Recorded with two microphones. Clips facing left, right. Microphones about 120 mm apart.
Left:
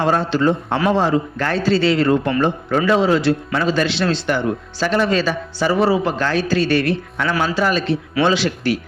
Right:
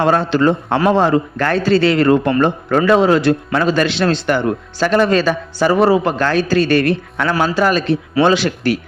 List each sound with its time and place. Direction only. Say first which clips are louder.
0.0 s a man's voice: right 3 dB; 65° right (ahead or behind)